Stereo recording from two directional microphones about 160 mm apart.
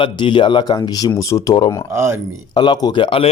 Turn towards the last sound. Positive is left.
turn(degrees=35)  # may be behind; listen again after turning